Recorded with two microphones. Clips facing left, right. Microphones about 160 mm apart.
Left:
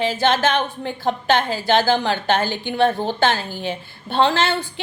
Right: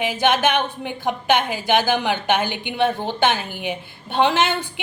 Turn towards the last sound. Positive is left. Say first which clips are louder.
# even
turn(degrees=-15)  # may be behind; listen again after turning